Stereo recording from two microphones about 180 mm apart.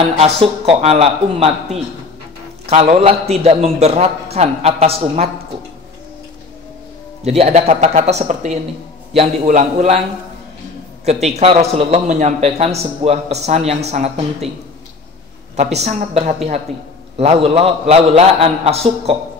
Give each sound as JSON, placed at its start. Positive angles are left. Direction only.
{"t": 0.2, "sound": "a man's voice", "side_deg": -35}
{"t": 7.2, "sound": "a man's voice", "side_deg": -35}
{"t": 11.1, "sound": "a man's voice", "side_deg": -35}
{"t": 15.5, "sound": "a man's voice", "side_deg": -40}
{"t": 16.7, "sound": "a man's voice", "side_deg": 0}
{"t": 17.2, "sound": "a man's voice", "side_deg": -35}